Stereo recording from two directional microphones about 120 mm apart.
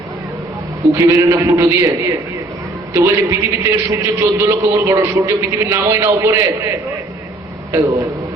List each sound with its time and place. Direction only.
0.9 s a man's voice: 25° right (ahead or behind)
7.7 s a man's voice: 25° right (ahead or behind)